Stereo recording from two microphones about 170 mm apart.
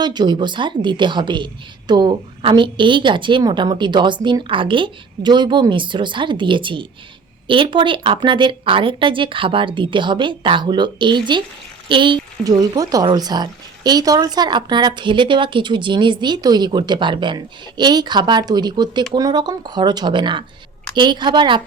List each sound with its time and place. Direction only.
0.0 s speech: 25° right (ahead or behind)